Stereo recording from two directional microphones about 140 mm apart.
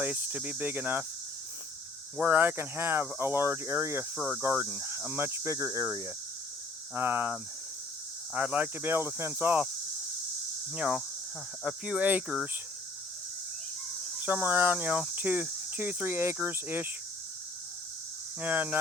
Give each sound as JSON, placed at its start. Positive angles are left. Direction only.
{"t": 0.0, "sound": "cricket", "side_deg": -10}
{"t": 2.1, "sound": "cricket", "side_deg": -10}
{"t": 4.2, "sound": "speech", "side_deg": -5}
{"t": 4.4, "sound": "cricket", "side_deg": -15}
{"t": 10.8, "sound": "cricket", "side_deg": -10}
{"t": 14.2, "sound": "cricket", "side_deg": -10}
{"t": 18.3, "sound": "cricket", "side_deg": -10}